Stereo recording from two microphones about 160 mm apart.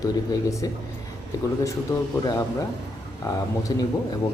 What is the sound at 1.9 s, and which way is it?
Speech, 25° left (ahead or behind).